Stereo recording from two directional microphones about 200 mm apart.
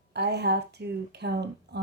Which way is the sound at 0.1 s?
55° right (ahead or behind).